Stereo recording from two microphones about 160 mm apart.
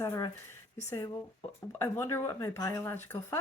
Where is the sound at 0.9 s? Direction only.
20° left (ahead or behind).